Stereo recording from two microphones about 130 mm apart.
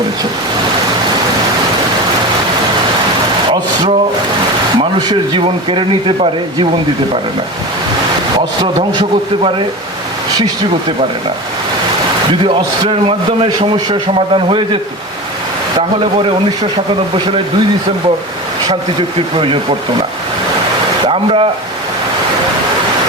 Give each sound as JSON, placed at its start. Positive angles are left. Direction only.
{"t": 4.8, "sound": "a man's voice", "side_deg": -35}
{"t": 8.6, "sound": "a man's voice", "side_deg": -40}
{"t": 12.5, "sound": "a man's voice", "side_deg": -40}
{"t": 18.7, "sound": "a man's voice", "side_deg": -40}
{"t": 21.1, "sound": "speech", "side_deg": -45}